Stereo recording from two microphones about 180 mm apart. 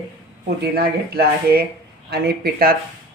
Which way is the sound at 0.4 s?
60° right (ahead or behind).